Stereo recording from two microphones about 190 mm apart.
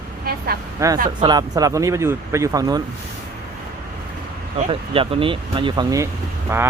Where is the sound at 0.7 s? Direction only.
15° right (ahead or behind).